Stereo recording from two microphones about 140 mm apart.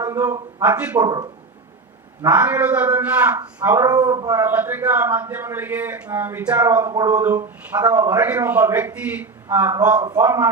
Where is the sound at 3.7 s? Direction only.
25° right (ahead or behind).